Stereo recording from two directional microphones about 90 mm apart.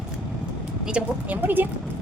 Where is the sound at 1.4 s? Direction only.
20° right (ahead or behind).